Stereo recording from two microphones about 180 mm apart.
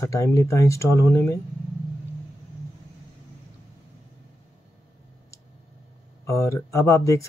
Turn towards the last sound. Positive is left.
turn(degrees=15)  # may be behind; listen again after turning